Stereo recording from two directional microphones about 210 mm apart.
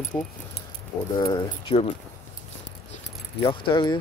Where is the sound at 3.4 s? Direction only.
25° left (ahead or behind).